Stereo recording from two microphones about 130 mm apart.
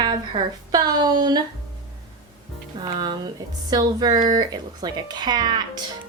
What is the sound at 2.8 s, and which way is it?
Speech, 35° right (ahead or behind).